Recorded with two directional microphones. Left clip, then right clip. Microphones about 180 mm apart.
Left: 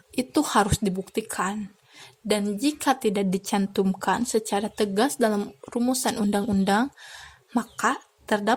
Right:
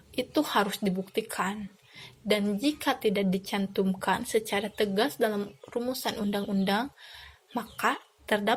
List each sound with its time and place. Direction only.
0.2 s a woman's voice: 45° left (ahead or behind)